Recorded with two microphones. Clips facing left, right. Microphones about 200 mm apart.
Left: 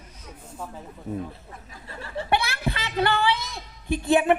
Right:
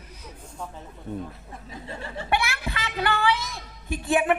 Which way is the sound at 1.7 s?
20° right (ahead or behind).